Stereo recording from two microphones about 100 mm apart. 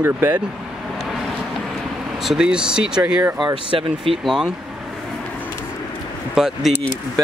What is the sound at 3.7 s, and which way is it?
Speech, 60° right (ahead or behind).